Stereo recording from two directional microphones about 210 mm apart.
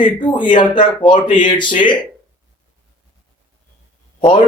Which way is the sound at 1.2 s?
40° left (ahead or behind).